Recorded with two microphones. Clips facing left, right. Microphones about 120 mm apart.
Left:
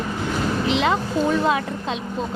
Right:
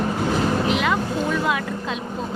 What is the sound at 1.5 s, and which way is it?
Speech, 30° left (ahead or behind).